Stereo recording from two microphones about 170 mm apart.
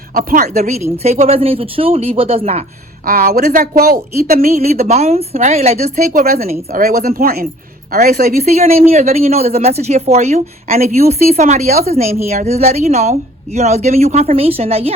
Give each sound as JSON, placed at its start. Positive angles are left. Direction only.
{"t": 0.1, "sound": "speech", "side_deg": -55}
{"t": 0.6, "sound": "a woman's voice", "side_deg": -40}
{"t": 3.1, "sound": "speech", "side_deg": -60}
{"t": 4.9, "sound": "a woman's voice", "side_deg": -40}
{"t": 8.5, "sound": "a woman's voice", "side_deg": -40}